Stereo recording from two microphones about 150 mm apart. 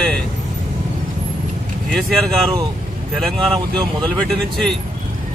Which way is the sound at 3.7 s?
30° right (ahead or behind).